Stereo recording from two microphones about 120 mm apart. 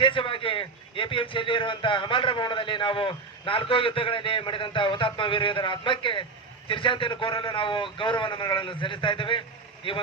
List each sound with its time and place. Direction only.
0.0 s a man's voice: 45° left (ahead or behind)